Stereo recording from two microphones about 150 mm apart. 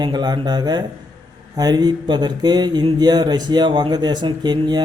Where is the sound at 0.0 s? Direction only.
30° right (ahead or behind).